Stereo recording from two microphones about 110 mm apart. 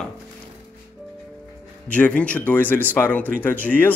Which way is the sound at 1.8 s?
15° left (ahead or behind).